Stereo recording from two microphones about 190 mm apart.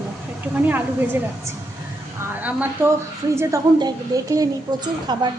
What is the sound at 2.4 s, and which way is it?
A woman's voice, 10° right (ahead or behind).